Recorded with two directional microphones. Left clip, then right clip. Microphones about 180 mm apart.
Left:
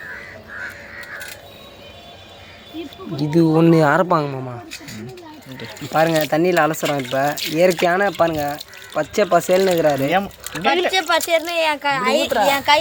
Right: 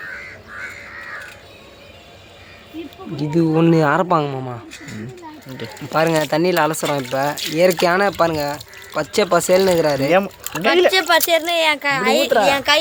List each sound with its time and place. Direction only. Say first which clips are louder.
2.8 s speech: left 1 dB; 30° left (ahead or behind)
3.2 s speech: left 1 dB; 10° left (ahead or behind); by 4.6 s 5° right (ahead or behind)
5.9 s speech: even; 5° right (ahead or behind)
6.3 s speech: even; 5° left (ahead or behind)
7.8 s speech: right 1 dB; 10° right (ahead or behind)
10.1 s speech: right 3 dB; 60° right (ahead or behind)
10.9 s speech: right 2 dB; 40° right (ahead or behind)